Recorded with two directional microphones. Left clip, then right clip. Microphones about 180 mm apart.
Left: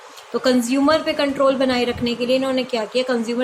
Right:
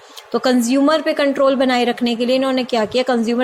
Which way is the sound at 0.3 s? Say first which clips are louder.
Right 2 dB; 30° right (ahead or behind).